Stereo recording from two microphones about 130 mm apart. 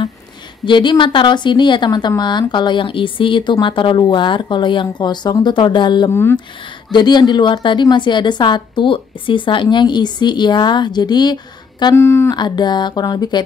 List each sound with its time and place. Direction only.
0.7 s a woman's voice: 40° left (ahead or behind)
6.0 s speech: 20° left (ahead or behind)
6.9 s a woman's voice: 35° left (ahead or behind)
11.9 s speech: 20° left (ahead or behind)
12.4 s a woman's voice: 35° left (ahead or behind)